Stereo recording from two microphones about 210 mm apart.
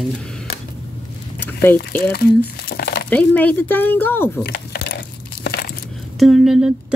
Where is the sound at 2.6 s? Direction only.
50° left (ahead or behind).